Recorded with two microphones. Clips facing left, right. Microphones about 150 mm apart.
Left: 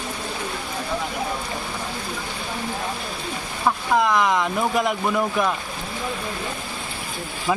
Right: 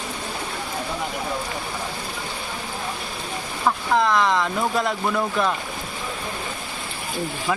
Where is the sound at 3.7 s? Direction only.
10° left (ahead or behind).